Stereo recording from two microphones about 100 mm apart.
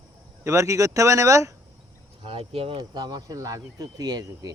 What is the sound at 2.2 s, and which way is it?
Speech, 70° right (ahead or behind).